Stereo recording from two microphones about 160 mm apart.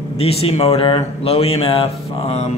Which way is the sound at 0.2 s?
40° left (ahead or behind).